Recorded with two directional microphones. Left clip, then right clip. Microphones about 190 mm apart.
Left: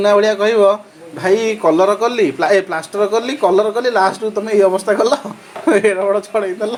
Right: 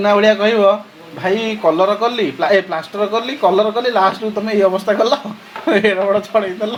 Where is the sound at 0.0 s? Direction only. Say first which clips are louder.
Even; 5° left (ahead or behind).